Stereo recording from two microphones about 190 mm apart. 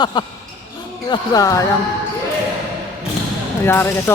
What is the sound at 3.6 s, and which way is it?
Speech, 10° left (ahead or behind).